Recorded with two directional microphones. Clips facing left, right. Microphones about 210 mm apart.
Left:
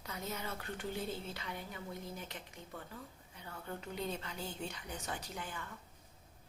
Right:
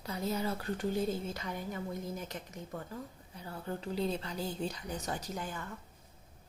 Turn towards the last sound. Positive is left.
turn(degrees=-45)  # may be behind; listen again after turning